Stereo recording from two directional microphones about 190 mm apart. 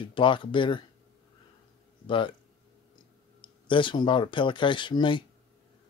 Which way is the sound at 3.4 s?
25° left (ahead or behind).